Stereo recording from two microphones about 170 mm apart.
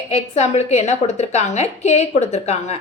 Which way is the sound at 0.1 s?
40° left (ahead or behind).